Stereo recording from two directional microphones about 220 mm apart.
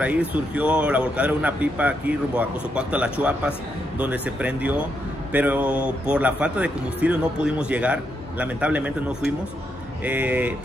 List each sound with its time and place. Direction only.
0.0 s speech: 5° right (ahead or behind)